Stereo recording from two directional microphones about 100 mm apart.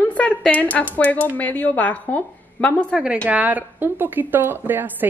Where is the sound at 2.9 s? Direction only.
10° right (ahead or behind).